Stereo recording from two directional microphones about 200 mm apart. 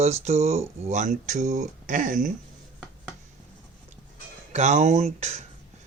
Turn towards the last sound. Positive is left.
turn(degrees=-35)  # may be behind; listen again after turning